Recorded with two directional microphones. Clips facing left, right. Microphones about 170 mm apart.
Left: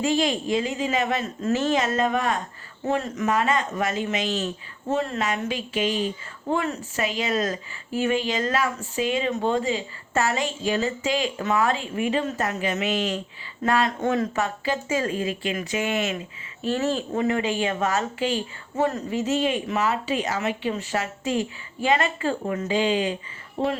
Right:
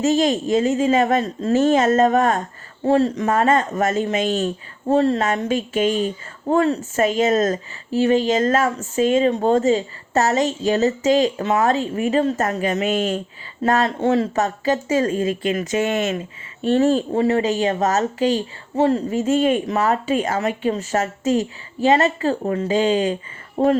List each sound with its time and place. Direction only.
0.0 s speech: 45° right (ahead or behind)
2.8 s speech: 35° right (ahead or behind); by 4.5 s 50° right (ahead or behind)
4.9 s speech: 35° right (ahead or behind)
14.0 s speech: 30° right (ahead or behind)
18.8 s speech: 30° right (ahead or behind)
19.1 s speech: 50° right (ahead or behind)